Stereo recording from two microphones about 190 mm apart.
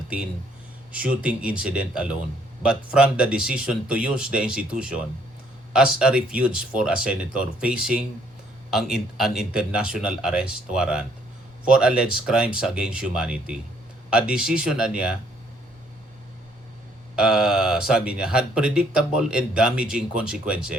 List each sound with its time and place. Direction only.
0.9 s speech: 5° right (ahead or behind)
17.2 s speech: 5° right (ahead or behind)